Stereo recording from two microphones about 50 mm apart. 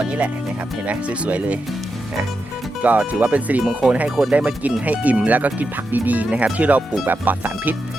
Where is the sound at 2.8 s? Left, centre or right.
Right.